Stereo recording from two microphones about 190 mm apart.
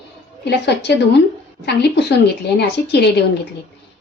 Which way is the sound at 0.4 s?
65° left (ahead or behind).